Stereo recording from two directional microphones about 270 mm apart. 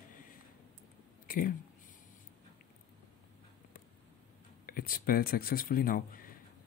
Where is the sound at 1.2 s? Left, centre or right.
Left.